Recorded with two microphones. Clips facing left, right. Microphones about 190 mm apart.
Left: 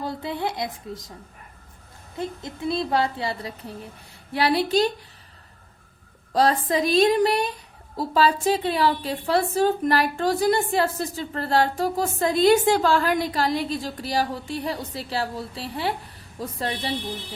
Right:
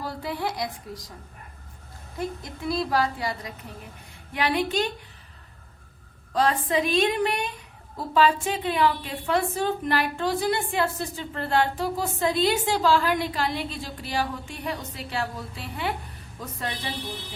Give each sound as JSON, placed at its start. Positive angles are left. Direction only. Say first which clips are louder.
{"t": 0.0, "sound": "a woman's voice", "louder": "left 2 dB", "side_deg": 20}
{"t": 2.1, "sound": "a woman's voice", "louder": "left 1 dB", "side_deg": 25}
{"t": 6.3, "sound": "a woman's voice", "louder": "left 2 dB", "side_deg": 35}